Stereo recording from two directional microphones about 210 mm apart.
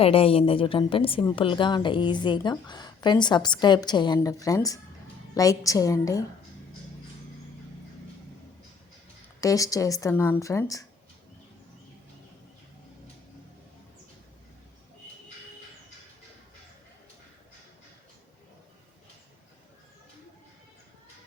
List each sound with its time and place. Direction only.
0.0 s a woman's voice: 25° left (ahead or behind)
9.4 s speech: 15° left (ahead or behind)